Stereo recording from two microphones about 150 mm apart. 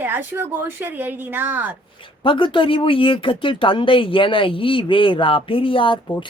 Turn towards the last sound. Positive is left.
turn(degrees=30)  # may be behind; listen again after turning